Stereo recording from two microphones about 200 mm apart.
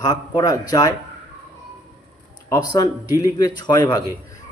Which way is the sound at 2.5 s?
20° left (ahead or behind).